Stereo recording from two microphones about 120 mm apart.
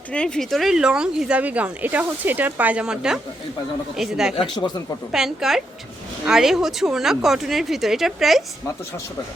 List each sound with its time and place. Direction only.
0.1 s a woman's voice: 10° left (ahead or behind)
4.4 s speech: 40° left (ahead or behind)
5.1 s a woman's voice: centre (ahead or behind)